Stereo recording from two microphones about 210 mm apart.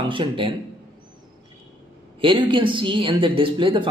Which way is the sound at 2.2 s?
25° right (ahead or behind).